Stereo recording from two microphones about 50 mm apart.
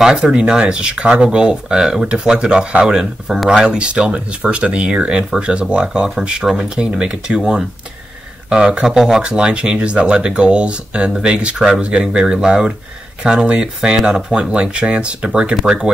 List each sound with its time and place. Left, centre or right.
0.0 s speech: centre
8.8 s speech: centre
9.2 s speech: centre